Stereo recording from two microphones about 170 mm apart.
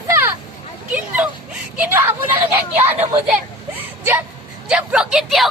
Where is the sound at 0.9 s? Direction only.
10° right (ahead or behind).